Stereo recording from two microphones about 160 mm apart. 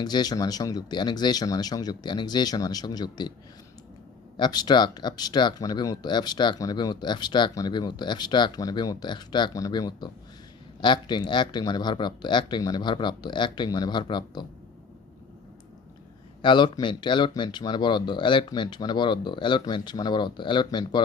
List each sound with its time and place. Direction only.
0.0 s speech: 25° left (ahead or behind)
4.4 s speech: 25° left (ahead or behind)
16.4 s speech: 30° left (ahead or behind)